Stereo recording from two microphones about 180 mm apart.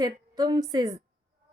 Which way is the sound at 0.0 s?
20° right (ahead or behind).